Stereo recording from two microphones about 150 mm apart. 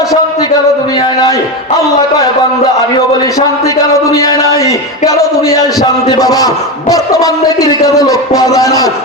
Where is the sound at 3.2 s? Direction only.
20° left (ahead or behind).